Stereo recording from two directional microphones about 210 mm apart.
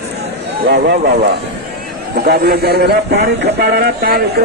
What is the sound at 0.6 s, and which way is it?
A man's voice, 50° right (ahead or behind).